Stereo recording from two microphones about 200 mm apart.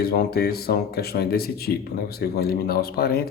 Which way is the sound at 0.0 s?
50° left (ahead or behind).